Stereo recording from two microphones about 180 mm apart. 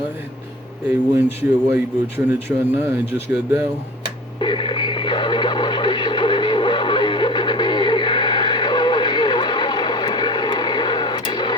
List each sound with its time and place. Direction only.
0.9 s speech: 10° right (ahead or behind)
4.4 s radio: 25° left (ahead or behind)